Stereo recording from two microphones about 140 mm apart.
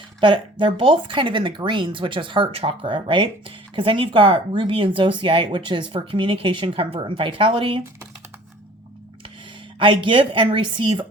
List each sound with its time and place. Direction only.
0.6 s speech: 35° right (ahead or behind)
9.7 s speech: 35° right (ahead or behind)